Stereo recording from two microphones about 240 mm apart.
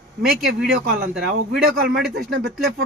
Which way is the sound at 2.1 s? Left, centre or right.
Right.